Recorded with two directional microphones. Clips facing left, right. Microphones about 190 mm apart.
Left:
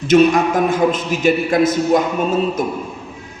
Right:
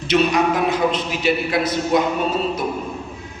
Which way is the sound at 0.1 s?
50° left (ahead or behind).